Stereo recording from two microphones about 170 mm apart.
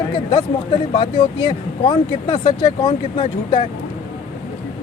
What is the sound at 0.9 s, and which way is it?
Speech, 30° left (ahead or behind).